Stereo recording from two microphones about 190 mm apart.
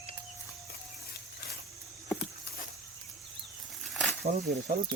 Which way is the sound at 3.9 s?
Centre (ahead or behind).